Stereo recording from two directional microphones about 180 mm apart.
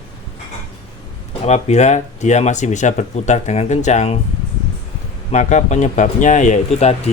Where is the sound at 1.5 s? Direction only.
40° left (ahead or behind).